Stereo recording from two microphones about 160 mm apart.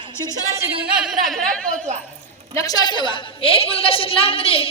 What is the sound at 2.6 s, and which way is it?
A woman's voice, 25° left (ahead or behind).